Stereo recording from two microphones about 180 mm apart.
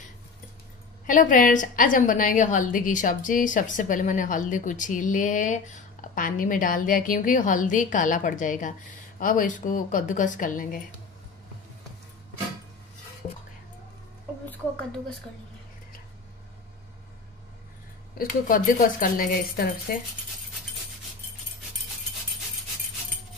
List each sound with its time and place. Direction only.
1.0 s a woman's voice: 45° left (ahead or behind)
18.1 s a woman's voice: 50° left (ahead or behind)